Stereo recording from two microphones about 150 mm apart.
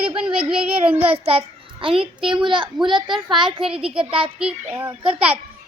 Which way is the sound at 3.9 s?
35° right (ahead or behind).